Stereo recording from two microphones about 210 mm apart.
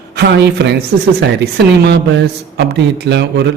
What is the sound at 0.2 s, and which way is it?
Speech, 55° right (ahead or behind).